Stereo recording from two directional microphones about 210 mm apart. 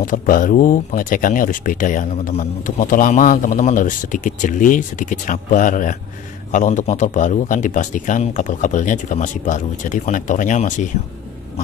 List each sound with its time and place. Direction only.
0.0 s speech: 40° left (ahead or behind)